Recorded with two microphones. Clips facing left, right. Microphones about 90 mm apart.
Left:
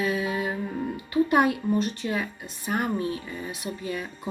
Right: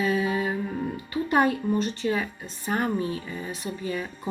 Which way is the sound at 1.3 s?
5° left (ahead or behind).